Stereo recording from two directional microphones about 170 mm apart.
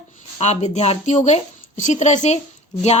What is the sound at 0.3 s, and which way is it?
A woman's voice, 40° left (ahead or behind).